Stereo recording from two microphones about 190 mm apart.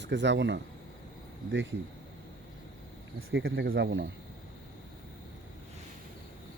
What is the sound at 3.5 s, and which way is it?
Speech, 60° right (ahead or behind).